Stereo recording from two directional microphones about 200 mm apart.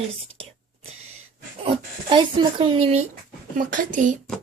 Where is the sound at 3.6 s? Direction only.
40° right (ahead or behind).